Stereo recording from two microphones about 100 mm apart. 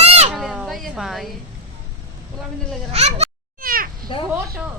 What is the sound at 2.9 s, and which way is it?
Speech, 90° right.